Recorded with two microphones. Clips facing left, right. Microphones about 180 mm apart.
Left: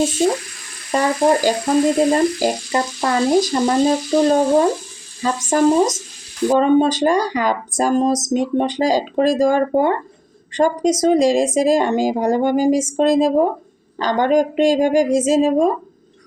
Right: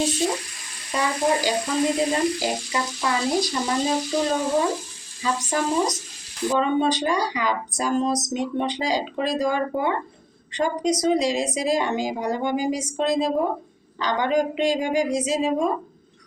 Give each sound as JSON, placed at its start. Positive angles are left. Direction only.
{"t": 0.9, "sound": "speech", "side_deg": 45}